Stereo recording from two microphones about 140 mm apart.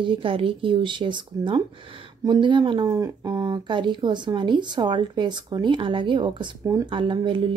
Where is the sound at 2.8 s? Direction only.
20° right (ahead or behind).